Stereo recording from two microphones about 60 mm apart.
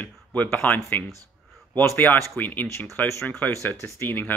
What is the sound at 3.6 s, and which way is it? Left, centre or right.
Speech, left.